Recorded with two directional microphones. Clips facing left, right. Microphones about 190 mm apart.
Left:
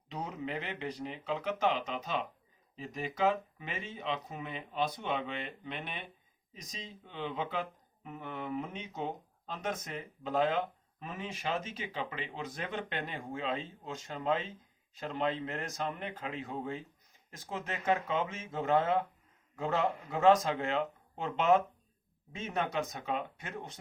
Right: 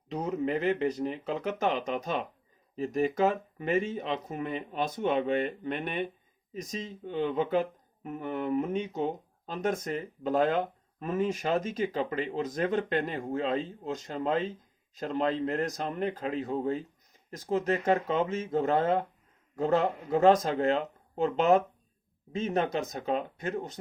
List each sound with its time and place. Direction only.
0.1 s speech: 45° right (ahead or behind)